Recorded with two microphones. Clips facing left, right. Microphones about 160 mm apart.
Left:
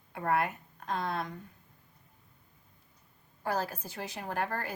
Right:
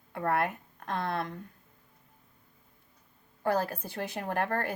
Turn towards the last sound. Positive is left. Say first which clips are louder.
# right 4 dB
turn(degrees=-60)  # may be behind; listen again after turning